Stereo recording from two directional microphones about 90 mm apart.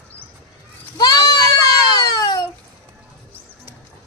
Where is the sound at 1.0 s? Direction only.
45° left (ahead or behind).